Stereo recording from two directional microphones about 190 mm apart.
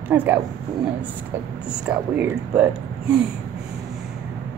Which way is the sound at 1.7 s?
5° right (ahead or behind).